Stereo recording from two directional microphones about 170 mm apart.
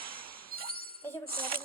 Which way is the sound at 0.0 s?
60° right (ahead or behind).